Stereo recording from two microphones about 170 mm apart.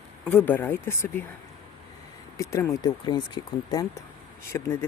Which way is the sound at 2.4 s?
20° left (ahead or behind).